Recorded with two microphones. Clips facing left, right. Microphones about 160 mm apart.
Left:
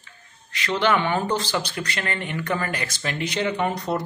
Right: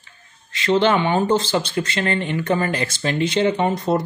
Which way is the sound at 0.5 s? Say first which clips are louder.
Right 5 dB; 25° right (ahead or behind).